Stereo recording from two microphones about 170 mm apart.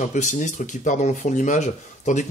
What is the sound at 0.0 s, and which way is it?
Speech, 50° left (ahead or behind).